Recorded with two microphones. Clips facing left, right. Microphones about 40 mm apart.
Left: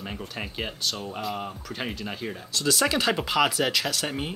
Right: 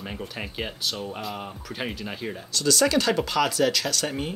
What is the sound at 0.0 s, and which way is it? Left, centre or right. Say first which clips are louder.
Speech: right 1 dB; centre.